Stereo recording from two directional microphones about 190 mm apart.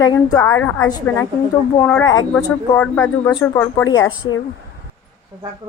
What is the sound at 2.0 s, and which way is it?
Speech, 20° left (ahead or behind).